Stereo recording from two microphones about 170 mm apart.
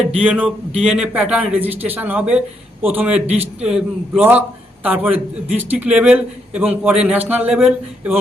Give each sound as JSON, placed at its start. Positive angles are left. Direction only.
{"t": 0.2, "sound": "a man's voice", "side_deg": -5}